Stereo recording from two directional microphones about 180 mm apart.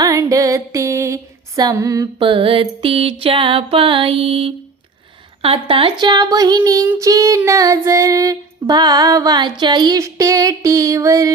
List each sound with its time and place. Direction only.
0.0 s music: 20° right (ahead or behind)
5.4 s child singing: 30° right (ahead or behind)